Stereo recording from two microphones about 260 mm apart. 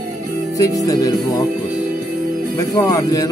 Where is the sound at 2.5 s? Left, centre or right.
Centre.